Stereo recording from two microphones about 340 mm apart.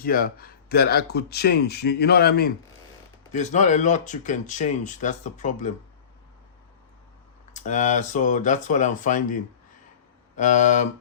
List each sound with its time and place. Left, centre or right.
0.0 s speech: left
7.5 s speech: left